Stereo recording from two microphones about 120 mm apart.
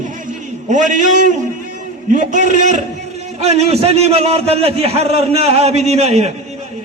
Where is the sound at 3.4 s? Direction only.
60° right (ahead or behind).